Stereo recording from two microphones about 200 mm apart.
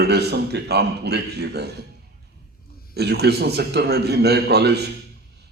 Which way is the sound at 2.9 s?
55° right (ahead or behind).